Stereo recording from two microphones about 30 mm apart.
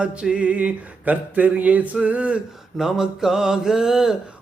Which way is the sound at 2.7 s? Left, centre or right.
Centre.